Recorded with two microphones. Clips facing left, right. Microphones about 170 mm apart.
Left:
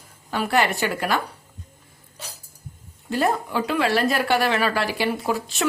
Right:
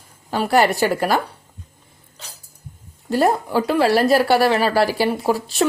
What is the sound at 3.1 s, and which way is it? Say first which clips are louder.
Speech: right 5 dB; 40° right (ahead or behind).